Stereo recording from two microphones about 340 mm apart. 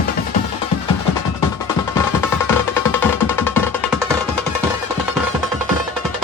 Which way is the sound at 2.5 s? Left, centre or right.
Centre.